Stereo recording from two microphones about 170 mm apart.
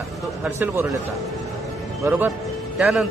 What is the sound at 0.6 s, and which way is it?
Speech, 15° right (ahead or behind).